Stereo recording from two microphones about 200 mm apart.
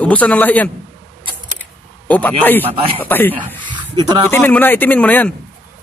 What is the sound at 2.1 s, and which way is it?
Speech, 10° left (ahead or behind).